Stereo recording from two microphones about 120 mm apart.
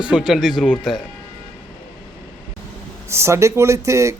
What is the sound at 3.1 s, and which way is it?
Speech, 20° right (ahead or behind).